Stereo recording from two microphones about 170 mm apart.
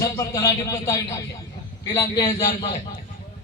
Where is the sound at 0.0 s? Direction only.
20° left (ahead or behind).